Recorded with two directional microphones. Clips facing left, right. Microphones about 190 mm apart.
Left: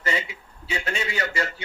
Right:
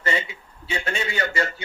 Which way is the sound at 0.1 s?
30° right (ahead or behind).